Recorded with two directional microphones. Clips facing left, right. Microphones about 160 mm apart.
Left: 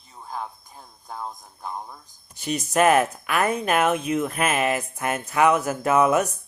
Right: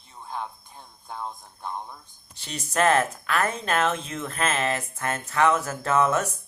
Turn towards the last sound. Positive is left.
turn(degrees=15)  # may be behind; listen again after turning